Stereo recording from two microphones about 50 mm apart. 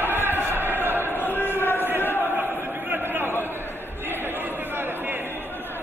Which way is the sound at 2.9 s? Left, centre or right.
Right.